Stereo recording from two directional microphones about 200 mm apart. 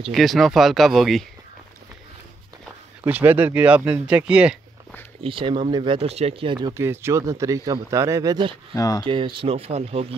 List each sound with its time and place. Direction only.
0.1 s speech: centre (ahead or behind)
3.0 s speech: 10° right (ahead or behind)
5.2 s speech: 25° right (ahead or behind)
8.7 s speech: 20° left (ahead or behind)
9.0 s speech: 25° right (ahead or behind)